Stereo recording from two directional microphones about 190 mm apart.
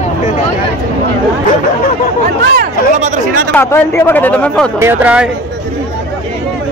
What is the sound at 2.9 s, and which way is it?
Speech, 40° right (ahead or behind).